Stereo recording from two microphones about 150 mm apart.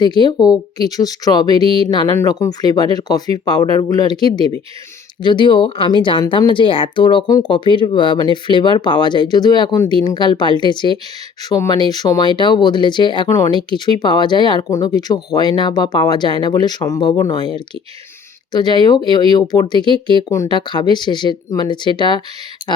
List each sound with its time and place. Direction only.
0.0 s speech: 30° left (ahead or behind)